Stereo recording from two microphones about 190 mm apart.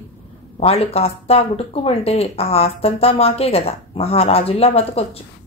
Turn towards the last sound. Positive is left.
turn(degrees=30)  # may be behind; listen again after turning